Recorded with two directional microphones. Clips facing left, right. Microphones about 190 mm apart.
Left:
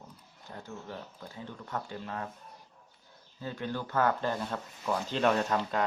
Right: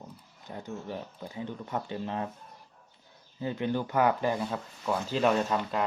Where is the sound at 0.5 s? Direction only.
20° right (ahead or behind).